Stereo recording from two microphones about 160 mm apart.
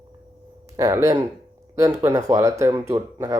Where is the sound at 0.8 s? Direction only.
20° right (ahead or behind).